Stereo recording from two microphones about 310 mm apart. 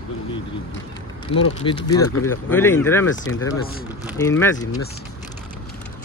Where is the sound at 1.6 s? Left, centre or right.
Centre.